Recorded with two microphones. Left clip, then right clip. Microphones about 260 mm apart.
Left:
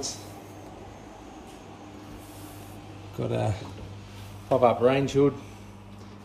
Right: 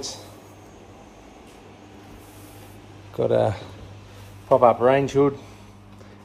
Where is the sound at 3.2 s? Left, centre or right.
Centre.